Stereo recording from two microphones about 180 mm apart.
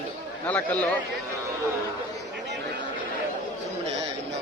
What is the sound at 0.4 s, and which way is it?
Speech, 10° left (ahead or behind).